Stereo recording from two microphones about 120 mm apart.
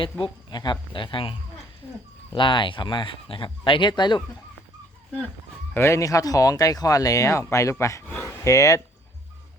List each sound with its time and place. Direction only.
0.0 s speech: 40° left (ahead or behind)
5.7 s speech: 25° left (ahead or behind)